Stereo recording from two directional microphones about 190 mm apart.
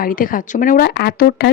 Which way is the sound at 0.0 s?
45° left (ahead or behind).